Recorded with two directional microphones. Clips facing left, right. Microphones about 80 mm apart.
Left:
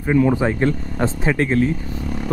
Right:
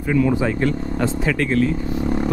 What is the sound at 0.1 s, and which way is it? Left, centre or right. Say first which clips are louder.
Speech: left 2 dB; left.